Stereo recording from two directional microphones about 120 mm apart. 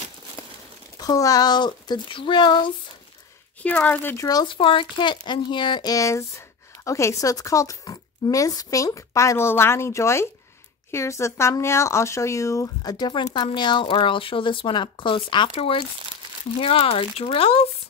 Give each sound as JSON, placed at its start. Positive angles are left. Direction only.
{"t": 0.9, "sound": "a woman's voice", "side_deg": 30}
{"t": 3.6, "sound": "speech", "side_deg": 10}
{"t": 4.3, "sound": "a woman's voice", "side_deg": 35}